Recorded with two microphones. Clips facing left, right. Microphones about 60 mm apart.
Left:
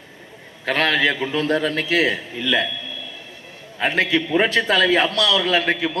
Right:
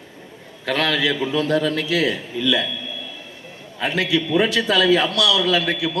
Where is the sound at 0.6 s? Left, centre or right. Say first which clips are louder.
Left 2 dB; left.